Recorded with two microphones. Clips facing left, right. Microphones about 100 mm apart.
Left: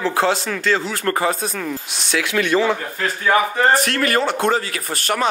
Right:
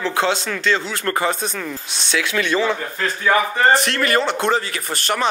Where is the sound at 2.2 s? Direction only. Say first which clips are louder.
Left 2 dB; 10° left (ahead or behind).